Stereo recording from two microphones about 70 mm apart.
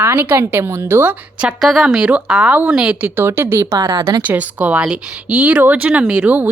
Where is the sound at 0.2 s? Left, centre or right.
Right.